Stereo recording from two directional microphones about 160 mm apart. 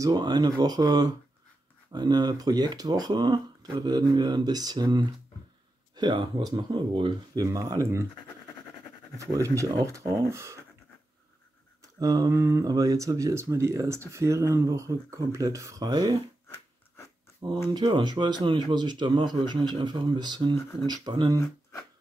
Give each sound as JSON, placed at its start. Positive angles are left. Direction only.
{"t": 0.0, "sound": "speech", "side_deg": -25}
{"t": 9.2, "sound": "speech", "side_deg": -20}
{"t": 11.8, "sound": "speech", "side_deg": -25}
{"t": 16.4, "sound": "a sound", "side_deg": 15}
{"t": 17.7, "sound": "speech", "side_deg": -30}